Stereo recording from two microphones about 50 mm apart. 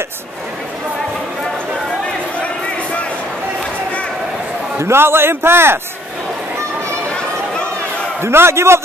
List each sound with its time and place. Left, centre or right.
2.4 s a sound: left
4.7 s a man's voice: right
8.2 s a man's voice: right